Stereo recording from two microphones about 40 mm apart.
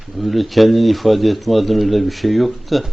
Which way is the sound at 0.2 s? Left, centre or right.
Centre.